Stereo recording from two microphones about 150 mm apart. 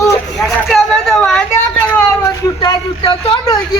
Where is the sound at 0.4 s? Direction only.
Centre (ahead or behind).